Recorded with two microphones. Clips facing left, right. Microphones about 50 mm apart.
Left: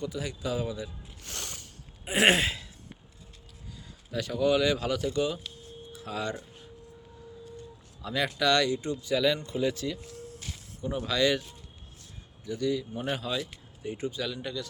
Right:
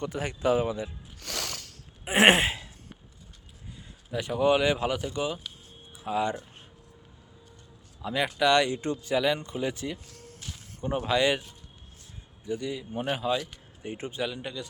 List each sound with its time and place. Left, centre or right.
0.0 s speech: right
1.2 s music: right
2.0 s a sound: right
4.1 s speech: right
8.0 s speech: centre
8.7 s speech: right
9.1 s speech: right
10.2 s a sound: right
12.5 s speech: right
13.8 s a sound: right
14.3 s speech: right